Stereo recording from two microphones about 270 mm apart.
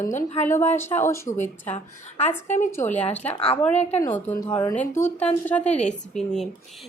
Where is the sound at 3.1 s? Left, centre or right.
Centre.